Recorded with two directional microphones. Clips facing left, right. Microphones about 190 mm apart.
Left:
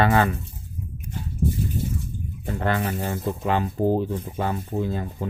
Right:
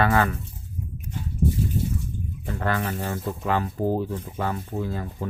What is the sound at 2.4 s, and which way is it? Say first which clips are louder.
Speech: left 2 dB; 25° left (ahead or behind).